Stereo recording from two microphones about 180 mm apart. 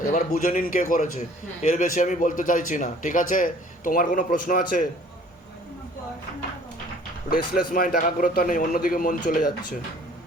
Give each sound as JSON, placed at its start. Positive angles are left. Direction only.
{"t": 0.0, "sound": "a man's voice", "side_deg": 50}
{"t": 7.3, "sound": "a man's voice", "side_deg": 50}